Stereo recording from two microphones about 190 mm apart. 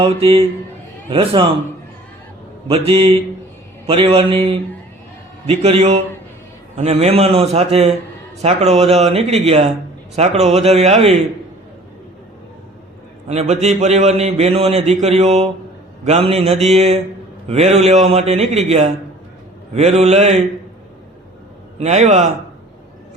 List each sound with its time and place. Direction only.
0.0 s a man's voice: 30° right (ahead or behind)
2.6 s a man's voice: 30° right (ahead or behind)
13.2 s a man's voice: 35° right (ahead or behind)
21.8 s a man's voice: 35° right (ahead or behind)